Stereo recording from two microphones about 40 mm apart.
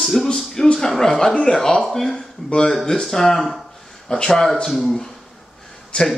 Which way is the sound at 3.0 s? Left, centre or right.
Centre.